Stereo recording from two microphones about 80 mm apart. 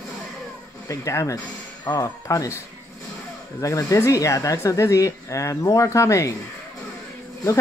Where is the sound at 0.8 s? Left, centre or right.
Left.